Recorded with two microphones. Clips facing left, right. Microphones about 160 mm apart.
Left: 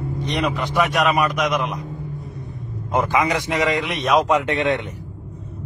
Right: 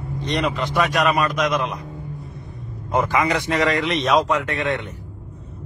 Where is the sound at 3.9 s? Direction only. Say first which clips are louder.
Right 1 dB; centre (ahead or behind).